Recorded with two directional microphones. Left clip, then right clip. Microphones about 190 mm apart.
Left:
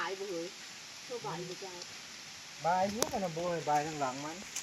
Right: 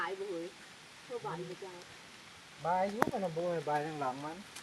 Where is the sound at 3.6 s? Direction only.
25° left (ahead or behind).